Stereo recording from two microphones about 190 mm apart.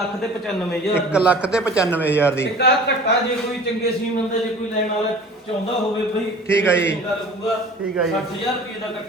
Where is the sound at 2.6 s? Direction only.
60° left (ahead or behind).